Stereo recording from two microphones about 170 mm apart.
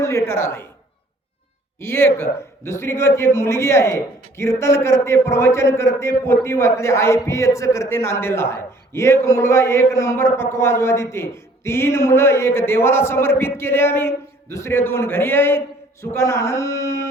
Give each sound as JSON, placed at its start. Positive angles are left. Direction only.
{"t": 0.0, "sound": "a man's voice", "side_deg": 15}
{"t": 1.8, "sound": "a man's voice", "side_deg": 15}